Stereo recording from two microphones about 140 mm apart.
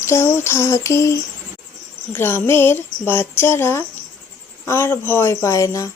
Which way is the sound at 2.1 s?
15° left (ahead or behind).